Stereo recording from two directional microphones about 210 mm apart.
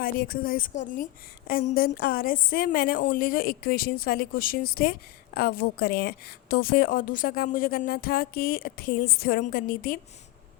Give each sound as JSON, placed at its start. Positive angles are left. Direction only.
{"t": 0.0, "sound": "a woman's voice", "side_deg": 45}